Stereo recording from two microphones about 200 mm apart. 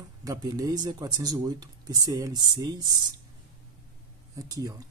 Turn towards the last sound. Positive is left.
turn(degrees=-20)  # may be behind; listen again after turning